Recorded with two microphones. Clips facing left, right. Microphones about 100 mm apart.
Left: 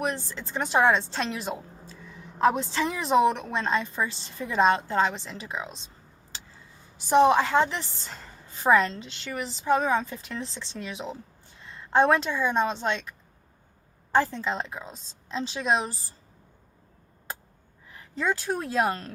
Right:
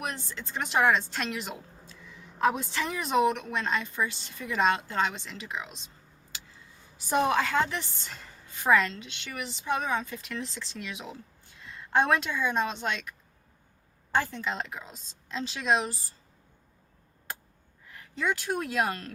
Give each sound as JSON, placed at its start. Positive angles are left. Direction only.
{"t": 0.0, "sound": "a woman's voice", "side_deg": 30}
{"t": 6.9, "sound": "a woman's voice", "side_deg": 25}
{"t": 18.1, "sound": "speech", "side_deg": 35}